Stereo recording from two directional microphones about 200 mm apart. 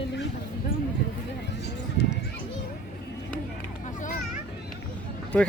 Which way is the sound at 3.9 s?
40° left (ahead or behind).